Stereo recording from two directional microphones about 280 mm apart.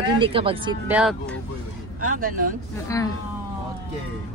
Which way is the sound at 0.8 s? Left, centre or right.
Centre.